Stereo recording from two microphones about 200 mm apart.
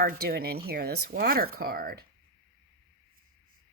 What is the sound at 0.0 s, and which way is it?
A woman's voice, 50° right (ahead or behind).